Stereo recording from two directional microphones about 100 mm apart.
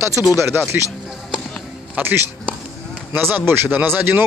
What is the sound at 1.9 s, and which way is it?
Speech, 20° right (ahead or behind).